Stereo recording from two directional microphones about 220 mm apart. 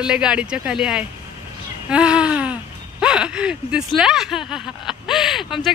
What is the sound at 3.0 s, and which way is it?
Speech, 5° right (ahead or behind).